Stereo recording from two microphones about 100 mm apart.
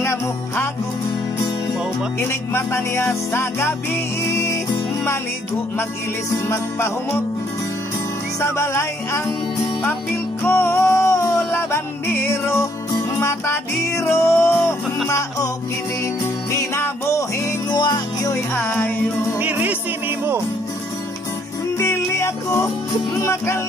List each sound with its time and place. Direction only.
0.0 s music: 30° left (ahead or behind)
2.1 s music: 25° left (ahead or behind)
6.3 s music: 30° left (ahead or behind)
8.4 s music: 30° left (ahead or behind)
10.4 s music: 25° left (ahead or behind)
16.5 s music: 25° left (ahead or behind)
17.6 s music: 45° left (ahead or behind)
18.3 s music: 25° left (ahead or behind)
19.3 s music: 20° right (ahead or behind)
21.7 s music: 25° left (ahead or behind)